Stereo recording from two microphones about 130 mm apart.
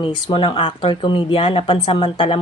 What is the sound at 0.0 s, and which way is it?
Speech, 40° left (ahead or behind).